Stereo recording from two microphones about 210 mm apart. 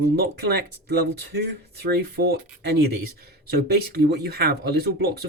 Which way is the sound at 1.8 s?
50° right (ahead or behind).